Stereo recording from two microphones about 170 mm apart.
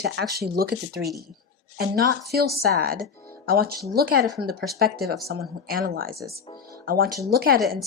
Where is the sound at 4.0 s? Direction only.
65° right (ahead or behind).